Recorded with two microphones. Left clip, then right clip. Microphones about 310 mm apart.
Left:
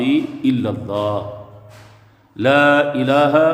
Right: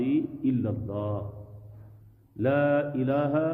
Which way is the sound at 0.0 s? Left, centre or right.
Centre.